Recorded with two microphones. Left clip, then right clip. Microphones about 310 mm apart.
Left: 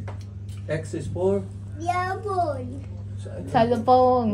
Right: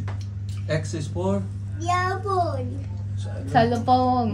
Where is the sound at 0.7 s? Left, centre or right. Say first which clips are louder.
Right 1 dB; centre.